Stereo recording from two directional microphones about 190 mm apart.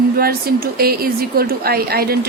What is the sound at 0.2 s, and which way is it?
A woman's voice, 55° right (ahead or behind).